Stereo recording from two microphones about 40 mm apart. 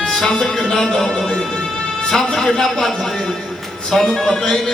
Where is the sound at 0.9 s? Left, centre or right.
Centre.